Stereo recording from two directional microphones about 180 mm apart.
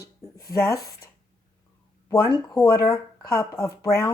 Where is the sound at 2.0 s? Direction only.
15° left (ahead or behind).